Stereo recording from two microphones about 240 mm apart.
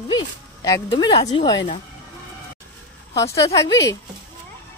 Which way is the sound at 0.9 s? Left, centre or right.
Centre.